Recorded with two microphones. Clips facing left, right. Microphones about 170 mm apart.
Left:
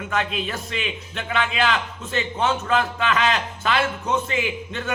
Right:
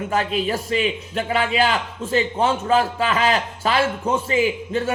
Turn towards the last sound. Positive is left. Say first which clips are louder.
# right 7 dB
turn(degrees=-30)  # may be behind; listen again after turning